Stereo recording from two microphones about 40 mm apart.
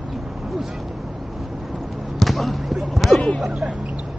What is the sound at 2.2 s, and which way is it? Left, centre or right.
Basketball bounce, centre.